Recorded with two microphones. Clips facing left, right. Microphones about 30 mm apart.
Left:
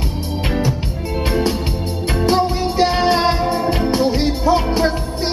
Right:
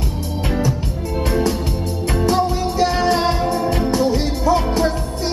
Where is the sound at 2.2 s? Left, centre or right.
Left.